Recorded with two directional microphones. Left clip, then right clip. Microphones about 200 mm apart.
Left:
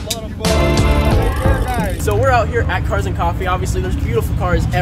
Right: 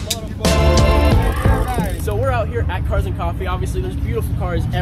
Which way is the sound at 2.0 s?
10° right (ahead or behind).